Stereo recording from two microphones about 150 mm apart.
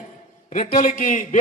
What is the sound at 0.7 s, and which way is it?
Speech, 65° left (ahead or behind).